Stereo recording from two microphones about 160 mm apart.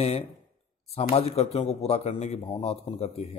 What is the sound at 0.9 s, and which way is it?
Speech, 40° left (ahead or behind).